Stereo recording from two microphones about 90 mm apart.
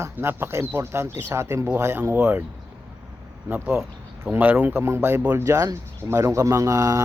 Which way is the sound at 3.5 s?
25° right (ahead or behind).